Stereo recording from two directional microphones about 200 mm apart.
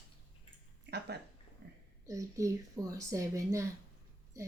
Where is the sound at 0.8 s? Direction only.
55° right (ahead or behind).